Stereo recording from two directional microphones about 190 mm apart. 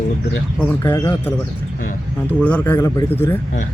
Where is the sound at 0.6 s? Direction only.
10° left (ahead or behind).